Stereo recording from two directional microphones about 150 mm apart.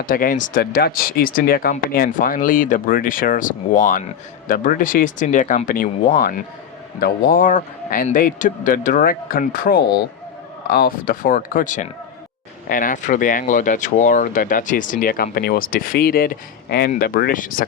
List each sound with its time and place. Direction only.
0.0 s speech: 70° left (ahead or behind)
2.0 s speech: 65° left (ahead or behind); by 16.9 s 90° left
17.0 s speech: 75° left (ahead or behind)